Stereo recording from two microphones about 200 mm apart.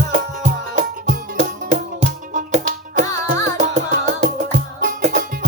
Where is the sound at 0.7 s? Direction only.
40° right (ahead or behind).